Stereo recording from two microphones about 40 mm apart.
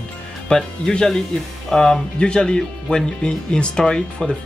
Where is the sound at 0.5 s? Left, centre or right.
Centre.